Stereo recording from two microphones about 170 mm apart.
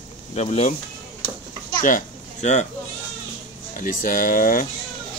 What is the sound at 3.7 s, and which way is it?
Speech, 50° left (ahead or behind).